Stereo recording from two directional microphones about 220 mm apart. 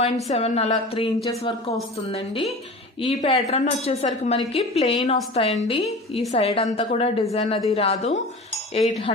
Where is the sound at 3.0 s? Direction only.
25° left (ahead or behind).